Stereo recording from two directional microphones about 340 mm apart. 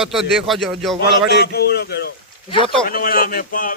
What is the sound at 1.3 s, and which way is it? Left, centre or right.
A man's voice, left.